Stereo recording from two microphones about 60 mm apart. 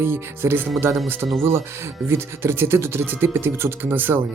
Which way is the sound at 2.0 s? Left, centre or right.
Right.